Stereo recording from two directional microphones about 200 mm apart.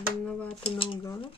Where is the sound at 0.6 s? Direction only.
25° left (ahead or behind).